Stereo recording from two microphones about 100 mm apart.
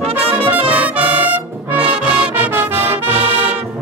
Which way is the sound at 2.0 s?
10° right (ahead or behind).